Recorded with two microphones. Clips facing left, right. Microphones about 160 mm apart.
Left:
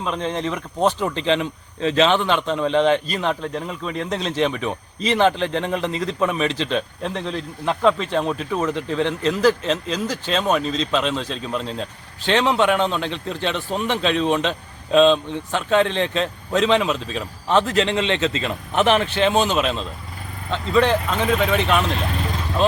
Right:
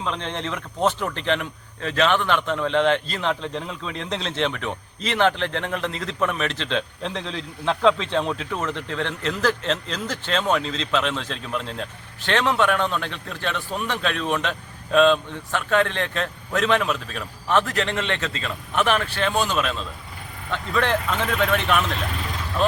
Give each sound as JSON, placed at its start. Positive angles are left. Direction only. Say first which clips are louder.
{"t": 0.0, "sound": "a man's voice", "louder": "left 4 dB", "side_deg": 10}